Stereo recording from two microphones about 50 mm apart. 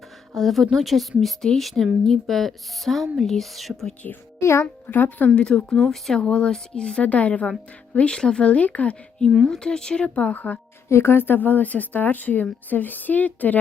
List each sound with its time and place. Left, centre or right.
0.3 s speech: centre
4.4 s a child's voice: left
4.9 s a woman's voice: left
5.3 s speech: centre
5.5 s speech: centre
6.1 s speech: left
7.0 s speech: left
8.1 s speech: centre; by 9.0 s left
9.5 s speech: centre; by 10.6 s left
10.8 s a woman's voice: left